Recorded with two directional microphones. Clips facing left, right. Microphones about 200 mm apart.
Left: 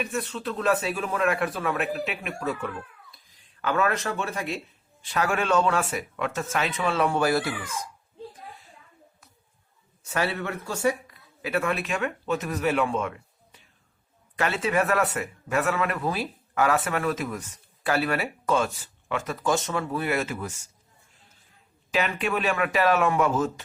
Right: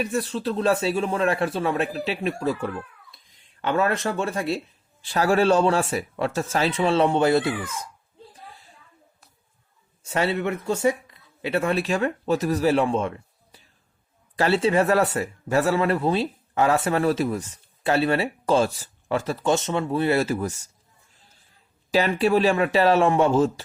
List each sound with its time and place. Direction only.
0.0 s speech: 35° right (ahead or behind)
10.1 s speech: 25° right (ahead or behind)
21.9 s speech: 35° right (ahead or behind)